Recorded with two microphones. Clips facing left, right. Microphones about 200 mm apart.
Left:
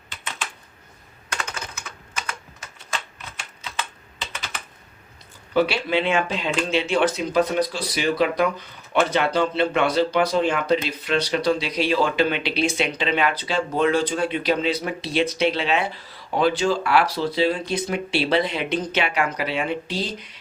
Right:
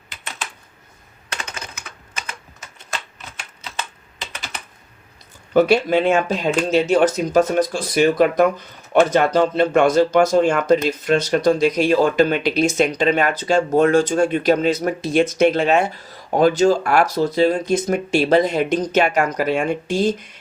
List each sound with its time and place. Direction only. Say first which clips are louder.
5.5 s speech: right 6 dB; 45° right (ahead or behind)